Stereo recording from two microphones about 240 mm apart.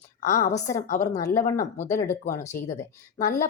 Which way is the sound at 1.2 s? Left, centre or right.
Centre.